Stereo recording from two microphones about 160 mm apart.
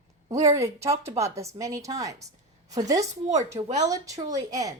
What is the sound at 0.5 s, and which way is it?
Speech, 20° right (ahead or behind).